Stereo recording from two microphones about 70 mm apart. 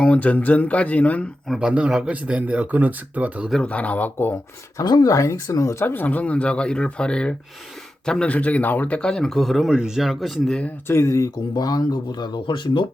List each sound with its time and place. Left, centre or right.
0.0 s speech: left
1.5 s speech: centre
3.6 s speech: centre
4.8 s speech: left
5.1 s speech: left
5.8 s a man's voice: left; by 10.5 s centre
10.8 s speech: left
11.5 s speech: left